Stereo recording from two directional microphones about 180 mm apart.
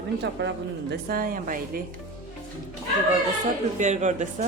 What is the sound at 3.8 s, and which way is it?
Speech, 40° right (ahead or behind).